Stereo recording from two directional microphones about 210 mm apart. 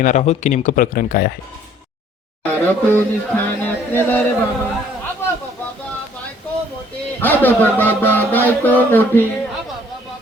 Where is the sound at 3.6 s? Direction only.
10° left (ahead or behind).